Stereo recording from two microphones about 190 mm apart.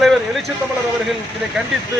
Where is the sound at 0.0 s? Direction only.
Centre (ahead or behind).